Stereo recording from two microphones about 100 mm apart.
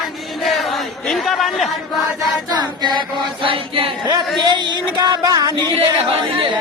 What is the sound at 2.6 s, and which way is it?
Chant, 45° right (ahead or behind).